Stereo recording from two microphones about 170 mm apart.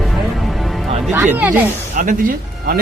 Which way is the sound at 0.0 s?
Centre (ahead or behind).